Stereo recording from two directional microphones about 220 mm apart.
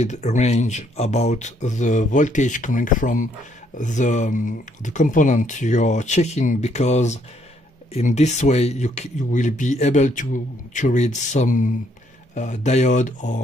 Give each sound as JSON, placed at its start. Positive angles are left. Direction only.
{"t": 0.0, "sound": "speech", "side_deg": 30}